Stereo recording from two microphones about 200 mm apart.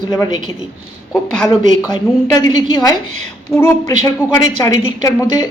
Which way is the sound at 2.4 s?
20° left (ahead or behind).